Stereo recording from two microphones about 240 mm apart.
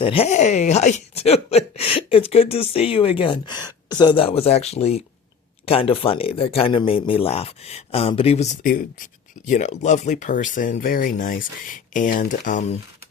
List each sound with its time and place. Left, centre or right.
0.0 s speech: left